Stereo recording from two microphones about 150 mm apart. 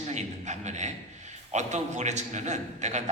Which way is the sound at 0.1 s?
50° right (ahead or behind).